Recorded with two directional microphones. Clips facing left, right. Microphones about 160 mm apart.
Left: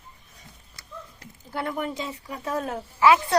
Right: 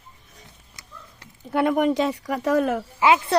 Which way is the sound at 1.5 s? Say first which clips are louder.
Right 10 dB; 75° right (ahead or behind).